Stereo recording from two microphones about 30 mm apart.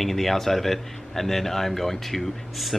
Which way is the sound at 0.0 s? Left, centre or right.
Centre.